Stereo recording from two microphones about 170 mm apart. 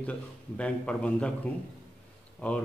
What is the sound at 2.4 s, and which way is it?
Speech, 5° left (ahead or behind).